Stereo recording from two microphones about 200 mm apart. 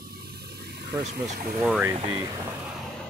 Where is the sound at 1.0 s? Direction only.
35° right (ahead or behind).